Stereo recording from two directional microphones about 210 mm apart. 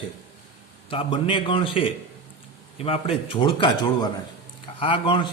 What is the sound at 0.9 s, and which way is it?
A man's voice, 25° left (ahead or behind).